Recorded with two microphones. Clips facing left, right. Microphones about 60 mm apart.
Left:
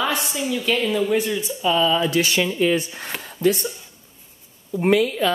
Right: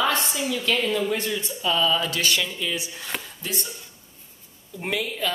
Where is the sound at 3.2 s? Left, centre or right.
Left.